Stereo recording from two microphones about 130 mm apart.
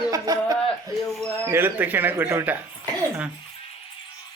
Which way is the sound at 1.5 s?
15° right (ahead or behind).